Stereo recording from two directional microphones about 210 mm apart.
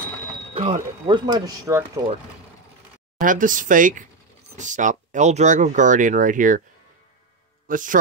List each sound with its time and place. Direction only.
0.6 s speech: 25° right (ahead or behind)
3.2 s speech: 40° right (ahead or behind)
7.6 s speech: 40° right (ahead or behind)